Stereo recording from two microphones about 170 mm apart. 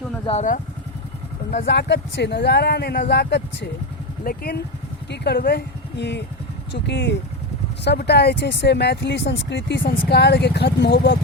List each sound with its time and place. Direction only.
0.3 s speech: 45° left (ahead or behind)
1.6 s speech: 85° left
4.2 s speech: 60° left (ahead or behind)
5.1 s speech: 75° left (ahead or behind); by 7.2 s 90° left
7.9 s speech: 75° left (ahead or behind)
10.1 s speech: 75° left (ahead or behind)